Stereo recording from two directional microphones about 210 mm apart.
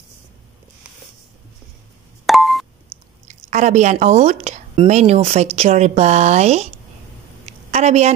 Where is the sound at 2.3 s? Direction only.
Centre (ahead or behind).